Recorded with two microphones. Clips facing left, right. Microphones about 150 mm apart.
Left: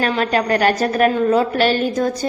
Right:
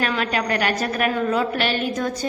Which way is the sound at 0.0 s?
35° left (ahead or behind).